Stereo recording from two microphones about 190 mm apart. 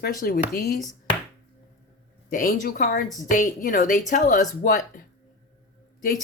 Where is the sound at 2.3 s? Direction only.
45° left (ahead or behind).